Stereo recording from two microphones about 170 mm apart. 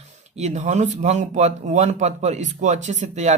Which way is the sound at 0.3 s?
40° right (ahead or behind).